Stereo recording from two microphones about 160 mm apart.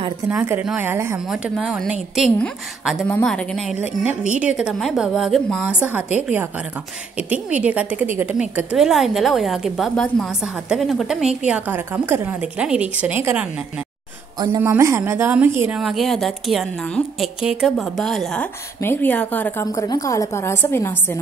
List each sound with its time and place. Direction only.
0.3 s a woman's voice: 10° right (ahead or behind)
1.3 s a woman's voice: 5° right (ahead or behind)
3.1 s a woman's voice: 10° left (ahead or behind); by 13.5 s 10° right (ahead or behind)
14.6 s a woman's voice: 15° right (ahead or behind)
15.8 s a woman's voice: centre (ahead or behind)